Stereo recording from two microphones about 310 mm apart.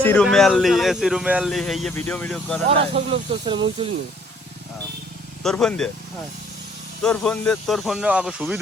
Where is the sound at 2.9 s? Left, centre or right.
Centre.